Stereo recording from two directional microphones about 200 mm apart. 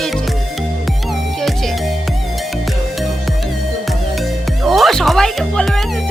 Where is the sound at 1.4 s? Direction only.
Centre (ahead or behind).